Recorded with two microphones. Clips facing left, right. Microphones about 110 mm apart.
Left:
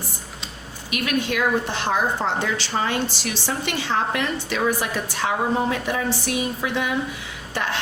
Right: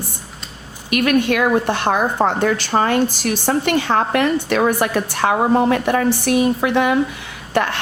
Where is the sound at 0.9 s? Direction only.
55° right (ahead or behind).